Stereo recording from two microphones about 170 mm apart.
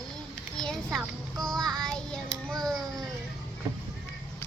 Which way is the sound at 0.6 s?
5° left (ahead or behind).